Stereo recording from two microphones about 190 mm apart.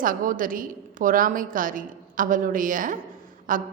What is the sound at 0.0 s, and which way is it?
A woman's voice, 45° right (ahead or behind).